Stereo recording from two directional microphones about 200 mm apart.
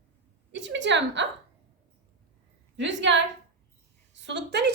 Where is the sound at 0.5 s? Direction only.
65° right (ahead or behind).